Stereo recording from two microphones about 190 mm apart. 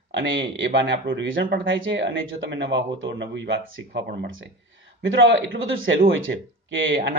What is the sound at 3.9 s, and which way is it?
Speech, 50° right (ahead or behind).